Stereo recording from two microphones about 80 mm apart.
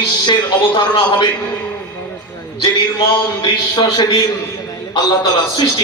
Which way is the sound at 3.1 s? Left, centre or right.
Left.